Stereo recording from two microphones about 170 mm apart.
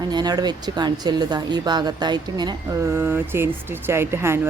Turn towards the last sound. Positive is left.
turn(degrees=-15)  # may be behind; listen again after turning